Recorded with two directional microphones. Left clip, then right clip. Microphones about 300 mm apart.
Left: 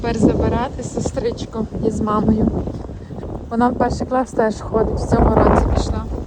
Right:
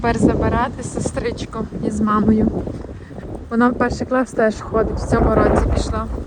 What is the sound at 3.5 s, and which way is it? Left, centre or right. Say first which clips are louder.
Speech: even; centre.